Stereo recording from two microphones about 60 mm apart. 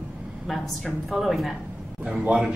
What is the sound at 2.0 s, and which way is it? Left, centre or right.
Speech, centre.